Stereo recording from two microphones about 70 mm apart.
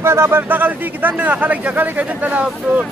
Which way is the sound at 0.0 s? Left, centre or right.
Right.